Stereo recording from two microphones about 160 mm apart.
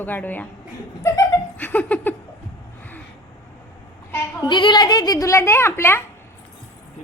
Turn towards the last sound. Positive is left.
turn(degrees=15)  # may be behind; listen again after turning